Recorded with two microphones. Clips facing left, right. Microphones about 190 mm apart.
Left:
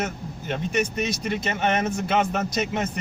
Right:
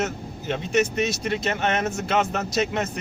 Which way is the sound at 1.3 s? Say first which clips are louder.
Left 1 dB; 10° left (ahead or behind).